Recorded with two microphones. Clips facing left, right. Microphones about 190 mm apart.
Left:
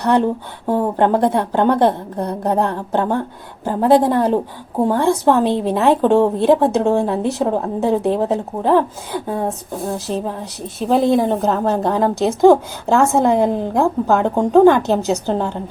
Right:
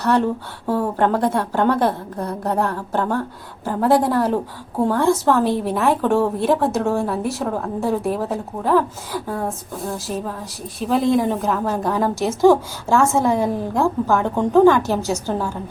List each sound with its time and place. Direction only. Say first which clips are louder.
0.0 s a woman's voice: left 2 dB; 20° left (ahead or behind)